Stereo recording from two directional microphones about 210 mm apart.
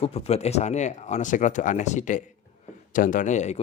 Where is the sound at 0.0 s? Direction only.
30° left (ahead or behind).